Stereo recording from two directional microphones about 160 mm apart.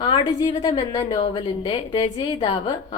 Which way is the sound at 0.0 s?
25° left (ahead or behind).